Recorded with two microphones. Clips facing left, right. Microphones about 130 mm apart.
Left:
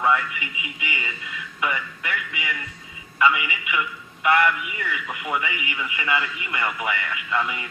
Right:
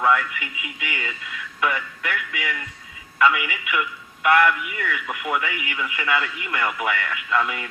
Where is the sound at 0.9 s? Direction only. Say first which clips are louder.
Right 1 dB; centre (ahead or behind).